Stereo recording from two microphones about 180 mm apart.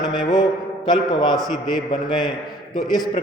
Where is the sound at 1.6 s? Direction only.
25° left (ahead or behind).